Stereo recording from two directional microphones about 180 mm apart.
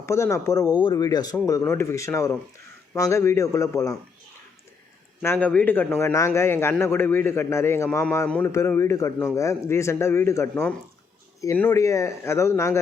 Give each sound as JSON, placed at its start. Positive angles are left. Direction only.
{"t": 0.0, "sound": "a man's voice", "side_deg": 15}
{"t": 5.2, "sound": "a man's voice", "side_deg": 10}